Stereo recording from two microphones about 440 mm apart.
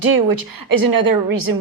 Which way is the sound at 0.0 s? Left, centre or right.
Right.